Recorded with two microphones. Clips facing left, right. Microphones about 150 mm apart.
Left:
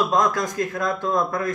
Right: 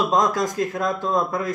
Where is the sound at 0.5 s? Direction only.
10° right (ahead or behind).